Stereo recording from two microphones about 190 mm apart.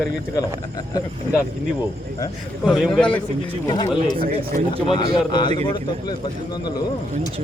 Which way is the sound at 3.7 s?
20° left (ahead or behind).